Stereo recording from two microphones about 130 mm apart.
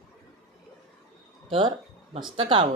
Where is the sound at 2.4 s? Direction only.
45° right (ahead or behind).